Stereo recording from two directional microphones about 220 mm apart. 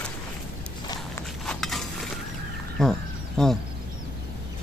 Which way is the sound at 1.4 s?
Centre (ahead or behind).